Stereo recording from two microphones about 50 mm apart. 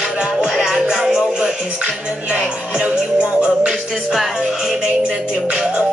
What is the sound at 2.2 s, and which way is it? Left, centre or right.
Music, right.